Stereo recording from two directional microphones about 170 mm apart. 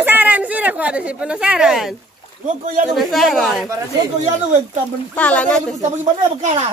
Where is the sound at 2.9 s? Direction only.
Centre (ahead or behind).